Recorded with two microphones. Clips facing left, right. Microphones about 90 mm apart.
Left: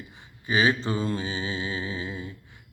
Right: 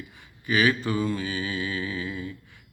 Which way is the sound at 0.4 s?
20° left (ahead or behind).